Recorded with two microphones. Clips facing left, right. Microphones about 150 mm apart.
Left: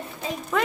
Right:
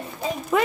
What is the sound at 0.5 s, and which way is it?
Speech, 10° right (ahead or behind).